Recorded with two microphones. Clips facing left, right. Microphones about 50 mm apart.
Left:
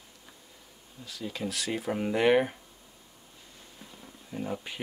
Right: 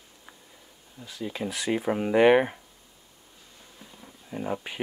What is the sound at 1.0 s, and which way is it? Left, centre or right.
Speech, centre.